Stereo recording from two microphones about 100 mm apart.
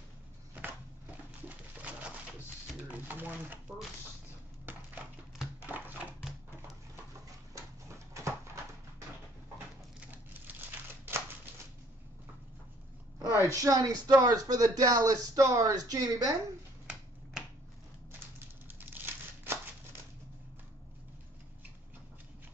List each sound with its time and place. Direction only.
1.1 s pigeon: 15° right (ahead or behind)
2.9 s chopping: 20° right (ahead or behind)
4.7 s a sound: 20° right (ahead or behind)
9.9 s crumpling: 20° right (ahead or behind)
13.3 s speech: 30° right (ahead or behind)
17.4 s finger snapping: 5° right (ahead or behind)
18.7 s crumpling: 20° right (ahead or behind)